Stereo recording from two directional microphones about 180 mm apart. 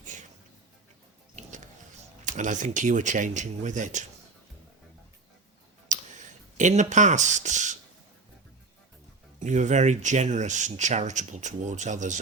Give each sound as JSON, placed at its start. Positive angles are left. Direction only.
{"t": 0.0, "sound": "a sound", "side_deg": -45}
{"t": 1.4, "sound": "music", "side_deg": -45}
{"t": 2.2, "sound": "speech", "side_deg": -45}
{"t": 5.9, "sound": "speech", "side_deg": -45}
{"t": 9.4, "sound": "speech", "side_deg": -40}